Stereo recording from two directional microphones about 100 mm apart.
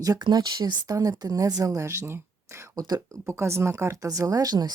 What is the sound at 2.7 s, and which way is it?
Speech, 40° right (ahead or behind).